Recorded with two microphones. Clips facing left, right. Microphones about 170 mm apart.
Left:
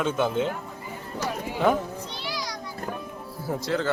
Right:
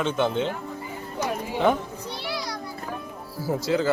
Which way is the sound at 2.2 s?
60° right (ahead or behind).